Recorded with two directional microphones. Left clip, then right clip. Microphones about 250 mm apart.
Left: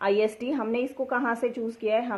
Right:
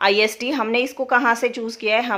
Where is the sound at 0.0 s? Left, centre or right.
Right.